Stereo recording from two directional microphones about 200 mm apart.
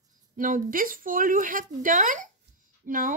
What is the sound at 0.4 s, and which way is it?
A woman's voice, 45° right (ahead or behind).